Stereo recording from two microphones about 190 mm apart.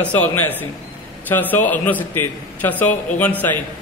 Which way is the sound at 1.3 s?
10° left (ahead or behind).